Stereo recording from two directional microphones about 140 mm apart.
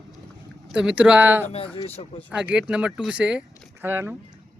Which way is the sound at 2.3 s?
10° right (ahead or behind).